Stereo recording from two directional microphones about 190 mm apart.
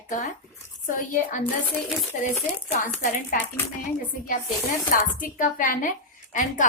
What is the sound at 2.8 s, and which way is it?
Speech, 45° left (ahead or behind).